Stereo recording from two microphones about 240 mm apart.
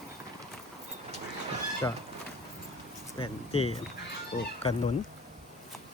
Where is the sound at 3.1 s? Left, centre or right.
Left.